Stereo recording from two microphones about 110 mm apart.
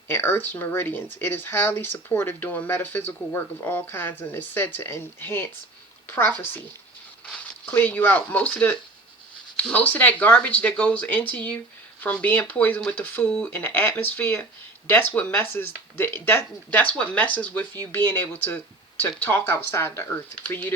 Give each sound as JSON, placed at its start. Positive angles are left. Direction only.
{"t": 0.1, "sound": "speech", "side_deg": 20}